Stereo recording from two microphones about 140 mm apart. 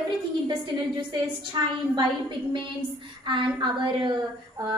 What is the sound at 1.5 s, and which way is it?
Speech, 30° right (ahead or behind).